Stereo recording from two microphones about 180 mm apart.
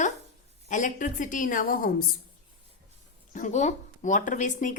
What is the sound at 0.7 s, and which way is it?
A woman's voice, 45° left (ahead or behind).